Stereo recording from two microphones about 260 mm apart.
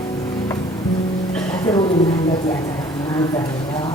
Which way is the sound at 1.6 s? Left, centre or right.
Centre.